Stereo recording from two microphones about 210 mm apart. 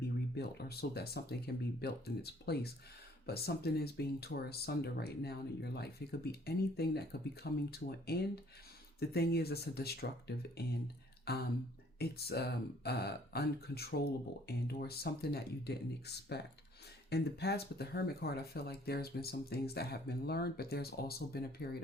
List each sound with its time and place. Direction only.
0.3 s speech: 50° left (ahead or behind)